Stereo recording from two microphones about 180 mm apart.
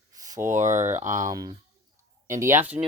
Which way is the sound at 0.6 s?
40° right (ahead or behind).